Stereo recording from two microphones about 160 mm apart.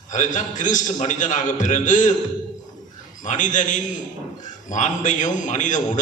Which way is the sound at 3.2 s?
50° left (ahead or behind).